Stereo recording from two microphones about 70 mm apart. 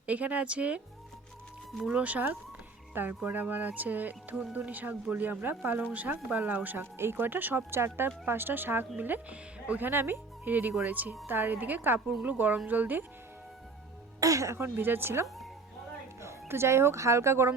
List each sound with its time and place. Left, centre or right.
0.0 s speech: right
1.8 s a woman's voice: centre
14.2 s speech: right
14.6 s a woman's voice: right